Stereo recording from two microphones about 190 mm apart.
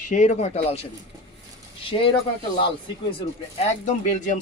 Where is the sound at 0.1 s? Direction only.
40° left (ahead or behind).